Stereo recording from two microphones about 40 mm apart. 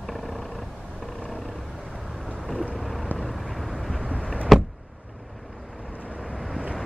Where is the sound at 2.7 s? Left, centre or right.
Centre.